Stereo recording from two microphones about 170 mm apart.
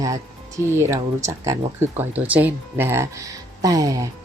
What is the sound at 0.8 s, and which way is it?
A woman's voice, 15° right (ahead or behind).